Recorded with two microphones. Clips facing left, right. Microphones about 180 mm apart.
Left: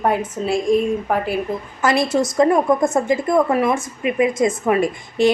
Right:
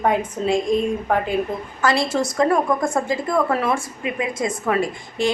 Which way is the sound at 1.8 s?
20° left (ahead or behind).